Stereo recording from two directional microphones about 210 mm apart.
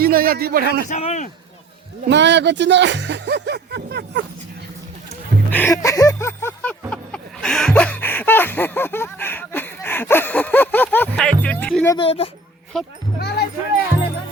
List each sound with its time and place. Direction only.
0.0 s speech: 45° right (ahead or behind)
0.9 s speech: 35° left (ahead or behind)
2.0 s speech: 55° right (ahead or behind)
5.5 s a sound: 10° left (ahead or behind)
11.9 s speech: 25° left (ahead or behind)
12.7 s speech: centre (ahead or behind)
13.1 s a sound: 50° left (ahead or behind)